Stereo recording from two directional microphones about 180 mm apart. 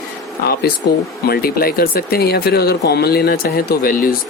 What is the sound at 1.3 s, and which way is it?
Speech, 55° left (ahead or behind).